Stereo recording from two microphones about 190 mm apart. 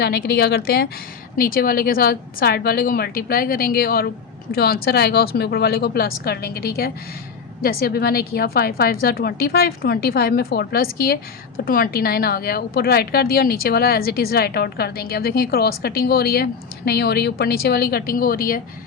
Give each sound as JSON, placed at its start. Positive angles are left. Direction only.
{"t": 0.0, "sound": "a woman's voice", "side_deg": 55}